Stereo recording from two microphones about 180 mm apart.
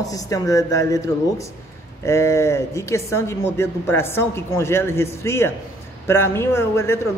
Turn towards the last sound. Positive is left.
turn(degrees=15)  # may be behind; listen again after turning